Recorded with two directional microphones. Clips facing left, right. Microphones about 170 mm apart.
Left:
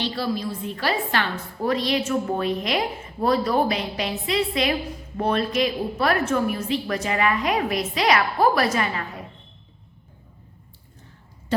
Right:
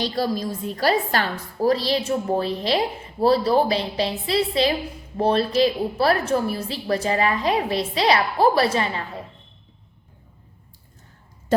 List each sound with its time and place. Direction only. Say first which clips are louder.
0.0 s a woman's voice: right 2 dB; 40° right (ahead or behind)